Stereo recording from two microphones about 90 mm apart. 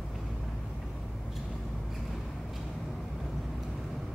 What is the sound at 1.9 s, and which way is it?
Vehicle, centre (ahead or behind).